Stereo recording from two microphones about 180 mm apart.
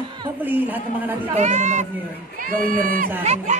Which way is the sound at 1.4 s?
40° right (ahead or behind).